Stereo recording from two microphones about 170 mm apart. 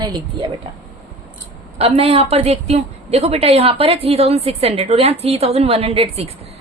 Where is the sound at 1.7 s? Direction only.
35° right (ahead or behind).